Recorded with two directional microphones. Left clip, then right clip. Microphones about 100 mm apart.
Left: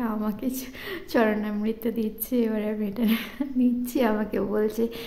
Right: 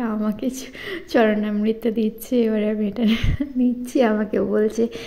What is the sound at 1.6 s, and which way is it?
A woman's voice, 35° right (ahead or behind).